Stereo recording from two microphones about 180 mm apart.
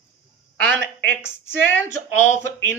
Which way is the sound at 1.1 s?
15° left (ahead or behind).